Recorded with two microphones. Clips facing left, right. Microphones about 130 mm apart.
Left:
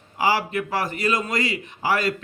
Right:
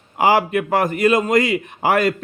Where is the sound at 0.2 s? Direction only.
55° right (ahead or behind).